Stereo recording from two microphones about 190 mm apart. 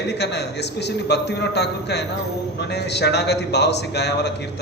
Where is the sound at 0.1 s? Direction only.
65° left (ahead or behind).